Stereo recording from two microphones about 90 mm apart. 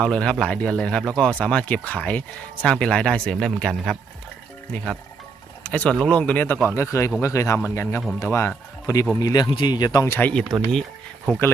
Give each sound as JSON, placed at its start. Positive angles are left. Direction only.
{"t": 0.0, "sound": "speech", "side_deg": 10}
{"t": 5.6, "sound": "speech", "side_deg": 15}
{"t": 6.7, "sound": "speech", "side_deg": 35}
{"t": 9.1, "sound": "speech", "side_deg": 45}
{"t": 10.2, "sound": "speech", "side_deg": 20}